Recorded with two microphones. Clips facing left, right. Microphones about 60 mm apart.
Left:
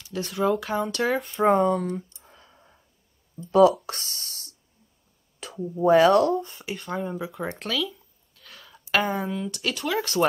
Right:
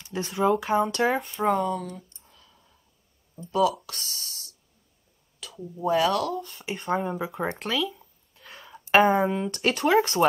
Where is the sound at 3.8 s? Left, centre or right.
Left.